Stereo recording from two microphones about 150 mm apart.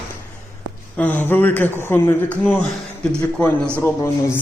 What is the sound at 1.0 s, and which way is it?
A man's voice, 10° left (ahead or behind).